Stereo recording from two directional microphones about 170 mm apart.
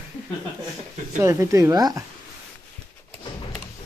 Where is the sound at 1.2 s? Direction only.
15° right (ahead or behind).